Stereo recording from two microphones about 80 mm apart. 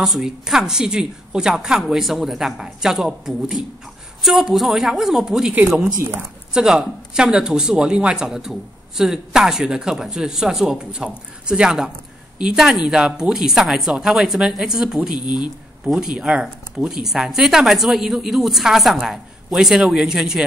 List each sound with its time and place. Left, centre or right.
0.0 s speech: centre
15.1 s speech: left
15.8 s speech: centre